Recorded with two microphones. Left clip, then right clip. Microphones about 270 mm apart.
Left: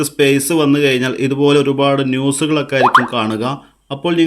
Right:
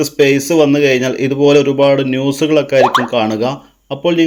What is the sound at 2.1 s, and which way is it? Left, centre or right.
Speech, left.